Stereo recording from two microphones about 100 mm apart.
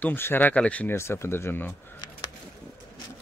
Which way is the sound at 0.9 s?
25° left (ahead or behind).